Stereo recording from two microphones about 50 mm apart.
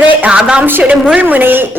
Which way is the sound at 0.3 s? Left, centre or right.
Centre.